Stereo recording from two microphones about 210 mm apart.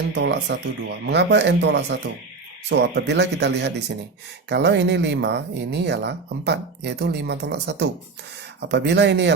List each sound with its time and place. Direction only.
0.1 s speech: 55° right (ahead or behind)